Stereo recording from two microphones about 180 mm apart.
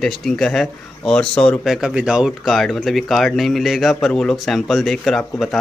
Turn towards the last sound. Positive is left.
turn(degrees=0)  # may be behind; listen again after turning